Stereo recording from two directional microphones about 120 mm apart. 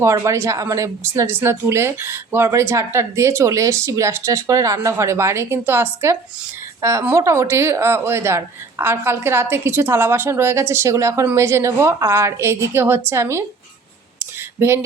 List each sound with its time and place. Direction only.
0.0 s speech: 25° right (ahead or behind)